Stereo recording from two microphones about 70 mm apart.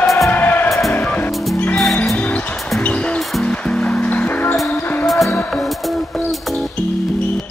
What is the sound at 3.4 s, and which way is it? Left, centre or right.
Music, centre.